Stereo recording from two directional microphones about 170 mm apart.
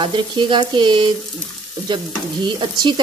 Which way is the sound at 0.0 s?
30° right (ahead or behind).